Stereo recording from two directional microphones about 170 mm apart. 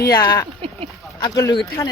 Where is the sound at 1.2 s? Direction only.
20° left (ahead or behind).